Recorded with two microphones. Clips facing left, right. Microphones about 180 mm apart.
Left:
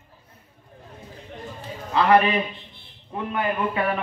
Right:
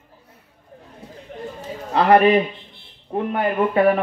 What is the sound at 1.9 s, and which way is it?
A man's voice, 40° right (ahead or behind).